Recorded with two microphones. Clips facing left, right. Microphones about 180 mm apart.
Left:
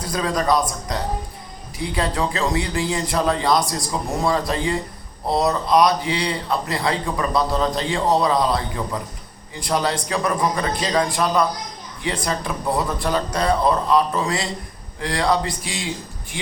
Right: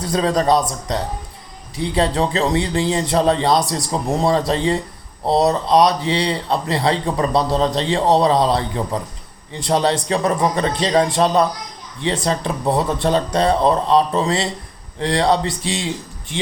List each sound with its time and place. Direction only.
0.1 s a man's voice: 30° right (ahead or behind)